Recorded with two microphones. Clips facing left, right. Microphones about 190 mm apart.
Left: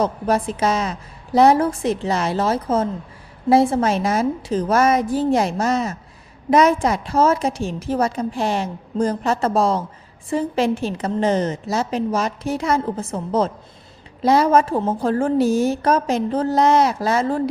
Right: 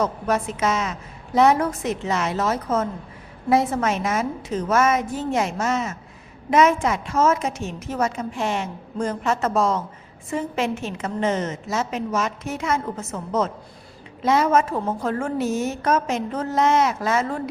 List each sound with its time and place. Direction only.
0.0 s a woman's voice: 30° left (ahead or behind)